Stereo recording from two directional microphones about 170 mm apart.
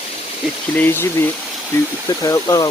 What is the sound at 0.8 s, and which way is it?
Speech, 15° left (ahead or behind).